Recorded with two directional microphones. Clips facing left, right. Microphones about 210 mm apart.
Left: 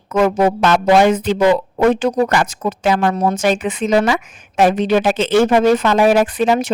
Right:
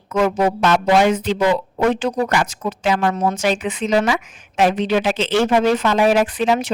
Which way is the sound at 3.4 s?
50° left (ahead or behind).